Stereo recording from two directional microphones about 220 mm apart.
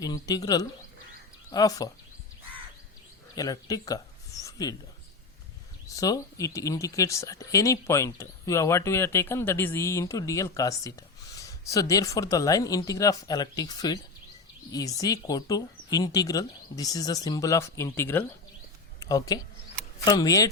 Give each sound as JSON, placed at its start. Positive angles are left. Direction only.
{"t": 0.0, "sound": "speech", "side_deg": 15}
{"t": 3.3, "sound": "speech", "side_deg": 15}
{"t": 6.0, "sound": "speech", "side_deg": 15}